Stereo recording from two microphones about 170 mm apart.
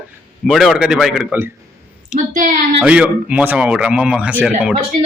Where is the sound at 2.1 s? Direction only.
50° right (ahead or behind).